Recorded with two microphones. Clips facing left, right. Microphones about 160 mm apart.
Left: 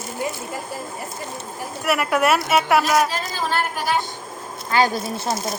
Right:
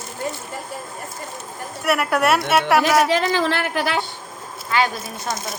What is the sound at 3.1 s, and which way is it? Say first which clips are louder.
Speech: right 5 dB; 75° right (ahead or behind).